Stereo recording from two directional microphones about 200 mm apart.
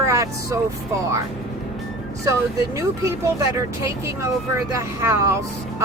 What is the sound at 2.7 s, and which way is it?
Speech, 15° right (ahead or behind).